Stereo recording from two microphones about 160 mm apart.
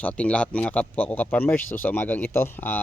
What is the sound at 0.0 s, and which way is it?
Speech, 10° left (ahead or behind).